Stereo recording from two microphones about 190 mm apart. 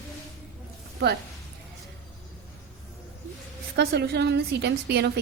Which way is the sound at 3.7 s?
60° right (ahead or behind).